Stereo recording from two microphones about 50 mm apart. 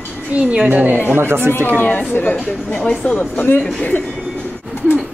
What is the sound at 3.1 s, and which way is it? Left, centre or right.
Speech, left.